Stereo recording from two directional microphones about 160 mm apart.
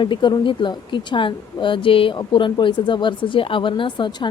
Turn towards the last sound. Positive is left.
turn(degrees=30)  # may be behind; listen again after turning